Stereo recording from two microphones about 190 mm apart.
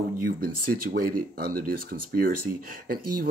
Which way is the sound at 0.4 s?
50° right (ahead or behind).